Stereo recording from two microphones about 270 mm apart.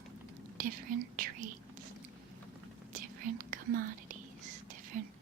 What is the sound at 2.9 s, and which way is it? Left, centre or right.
Whispering, right.